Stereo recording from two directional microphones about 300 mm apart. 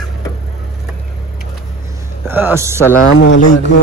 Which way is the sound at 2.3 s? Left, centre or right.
Centre.